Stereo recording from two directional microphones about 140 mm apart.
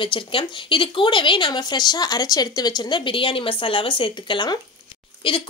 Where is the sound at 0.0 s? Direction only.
35° left (ahead or behind).